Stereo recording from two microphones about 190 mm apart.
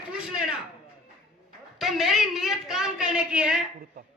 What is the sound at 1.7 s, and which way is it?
A man's voice, centre (ahead or behind).